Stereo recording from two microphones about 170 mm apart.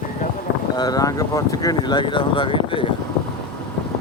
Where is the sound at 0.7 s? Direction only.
20° left (ahead or behind).